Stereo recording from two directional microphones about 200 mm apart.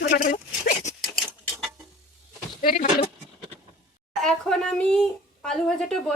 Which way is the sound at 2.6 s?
45° left (ahead or behind).